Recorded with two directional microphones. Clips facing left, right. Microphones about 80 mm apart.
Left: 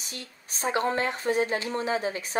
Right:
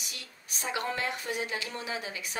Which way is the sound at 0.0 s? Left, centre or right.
Left.